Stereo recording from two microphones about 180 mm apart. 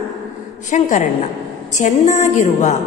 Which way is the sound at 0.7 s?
45° left (ahead or behind).